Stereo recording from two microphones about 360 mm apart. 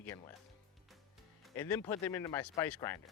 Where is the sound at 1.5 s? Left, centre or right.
Centre.